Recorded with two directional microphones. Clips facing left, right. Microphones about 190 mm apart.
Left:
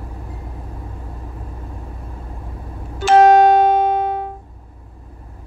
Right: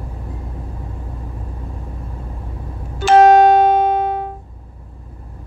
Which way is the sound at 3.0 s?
65° right (ahead or behind).